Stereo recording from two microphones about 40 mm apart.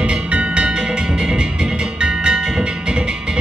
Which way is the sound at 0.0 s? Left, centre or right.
Right.